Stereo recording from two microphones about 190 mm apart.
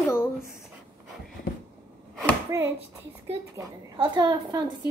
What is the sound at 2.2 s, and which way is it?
Speech, 15° right (ahead or behind).